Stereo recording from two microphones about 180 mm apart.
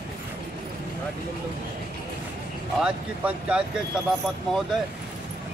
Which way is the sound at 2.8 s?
5° right (ahead or behind).